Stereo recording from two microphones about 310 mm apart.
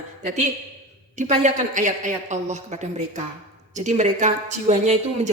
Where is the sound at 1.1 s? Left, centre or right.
Right.